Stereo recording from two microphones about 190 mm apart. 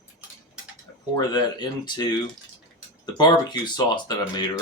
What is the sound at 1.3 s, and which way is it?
Speech, 25° left (ahead or behind).